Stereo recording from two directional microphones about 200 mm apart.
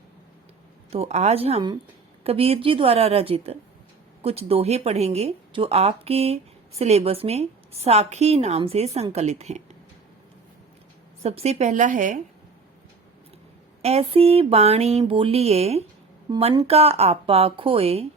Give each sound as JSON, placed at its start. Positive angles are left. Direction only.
{"t": 0.9, "sound": "a woman's voice", "side_deg": -30}
{"t": 11.2, "sound": "a woman's voice", "side_deg": -30}
{"t": 13.8, "sound": "a woman's voice", "side_deg": -30}